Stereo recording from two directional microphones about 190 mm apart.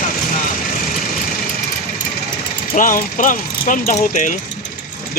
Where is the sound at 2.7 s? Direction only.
45° left (ahead or behind).